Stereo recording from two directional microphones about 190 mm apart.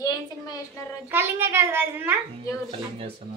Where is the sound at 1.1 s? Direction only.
10° right (ahead or behind).